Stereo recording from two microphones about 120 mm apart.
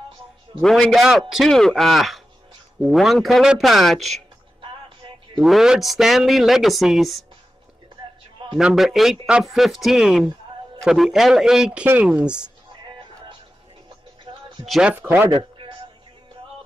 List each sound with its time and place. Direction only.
0.6 s speech: 5° left (ahead or behind)
4.6 s music: 45° right (ahead or behind)
5.4 s speech: 5° right (ahead or behind)
8.5 s speech: 5° right (ahead or behind)
12.8 s music: 40° right (ahead or behind)
14.7 s speech: 10° right (ahead or behind)
15.2 s a sound: 40° right (ahead or behind)